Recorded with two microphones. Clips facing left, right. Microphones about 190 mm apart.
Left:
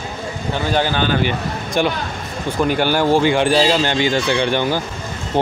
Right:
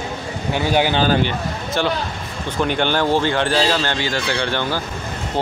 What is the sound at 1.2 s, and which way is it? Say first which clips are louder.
Speech: left 2 dB; 15° left (ahead or behind).